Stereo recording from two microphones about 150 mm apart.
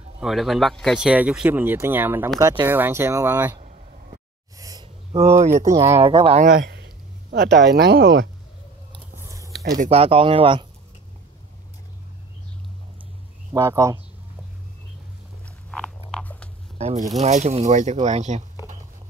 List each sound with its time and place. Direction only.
0.2 s speech: centre (ahead or behind)
2.4 s speech: 30° right (ahead or behind)
2.7 s speech: 15° right (ahead or behind)
3.6 s a sound: 60° right (ahead or behind)
4.6 s a sound: 25° right (ahead or behind)
5.1 s speech: 45° right (ahead or behind)
5.6 s speech: 20° right (ahead or behind)
5.9 s speech: 40° right (ahead or behind)
7.2 s speech: 90° right
9.2 s a sound: 20° right (ahead or behind)
9.8 s speech: 40° right (ahead or behind)
13.5 s speech: 20° right (ahead or behind)
15.7 s biting: 5° left (ahead or behind)
16.7 s speech: 45° right (ahead or behind)